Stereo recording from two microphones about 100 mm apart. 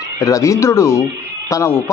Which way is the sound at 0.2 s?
35° left (ahead or behind).